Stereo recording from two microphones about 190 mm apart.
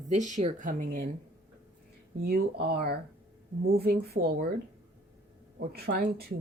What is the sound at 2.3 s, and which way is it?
Speech, 55° right (ahead or behind).